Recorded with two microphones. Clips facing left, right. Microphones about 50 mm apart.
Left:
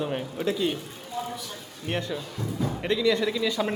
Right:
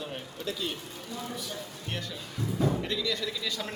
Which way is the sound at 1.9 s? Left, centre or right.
Left.